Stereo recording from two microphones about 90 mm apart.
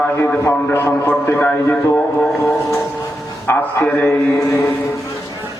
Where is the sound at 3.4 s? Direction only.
25° left (ahead or behind).